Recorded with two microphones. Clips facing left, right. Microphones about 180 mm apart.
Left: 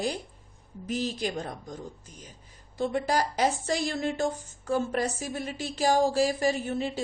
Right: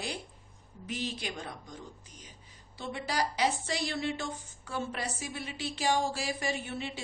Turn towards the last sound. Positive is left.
turn(degrees=40)  # may be behind; listen again after turning